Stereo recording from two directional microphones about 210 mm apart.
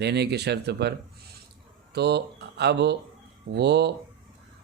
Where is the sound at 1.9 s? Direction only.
50° right (ahead or behind).